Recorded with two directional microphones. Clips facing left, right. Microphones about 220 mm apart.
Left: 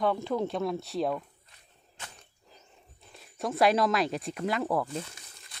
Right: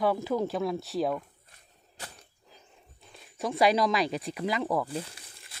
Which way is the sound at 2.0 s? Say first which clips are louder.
Right 2 dB; 35° right (ahead or behind).